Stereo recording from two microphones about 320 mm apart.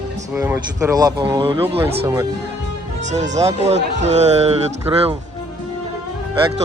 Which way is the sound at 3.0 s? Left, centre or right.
Right.